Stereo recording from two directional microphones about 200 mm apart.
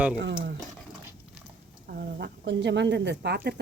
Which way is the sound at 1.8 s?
50° right (ahead or behind).